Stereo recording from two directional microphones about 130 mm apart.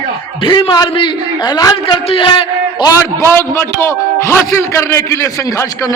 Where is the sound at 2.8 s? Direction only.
20° left (ahead or behind).